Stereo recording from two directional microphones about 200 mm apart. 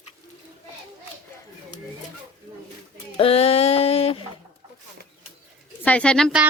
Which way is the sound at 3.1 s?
30° left (ahead or behind).